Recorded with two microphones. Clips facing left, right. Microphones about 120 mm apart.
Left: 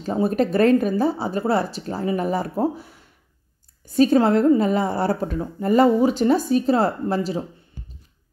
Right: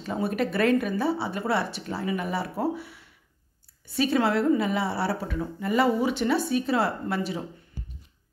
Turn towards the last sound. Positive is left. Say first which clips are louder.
# left 6 dB
turn(degrees=35)  # may be behind; listen again after turning